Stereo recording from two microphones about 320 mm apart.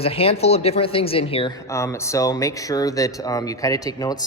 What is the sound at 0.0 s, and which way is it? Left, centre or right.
Speech, centre.